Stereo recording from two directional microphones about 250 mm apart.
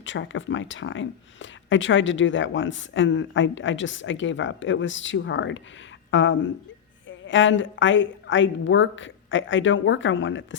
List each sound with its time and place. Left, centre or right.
0.0 s speech: left